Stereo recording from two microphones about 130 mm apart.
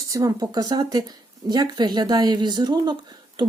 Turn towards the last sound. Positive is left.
turn(degrees=-35)  # may be behind; listen again after turning